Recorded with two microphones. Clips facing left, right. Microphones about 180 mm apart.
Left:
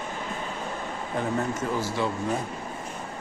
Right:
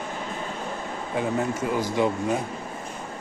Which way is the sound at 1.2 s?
10° right (ahead or behind).